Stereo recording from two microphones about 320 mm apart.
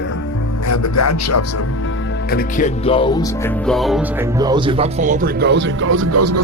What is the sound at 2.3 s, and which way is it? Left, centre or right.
Speech, left.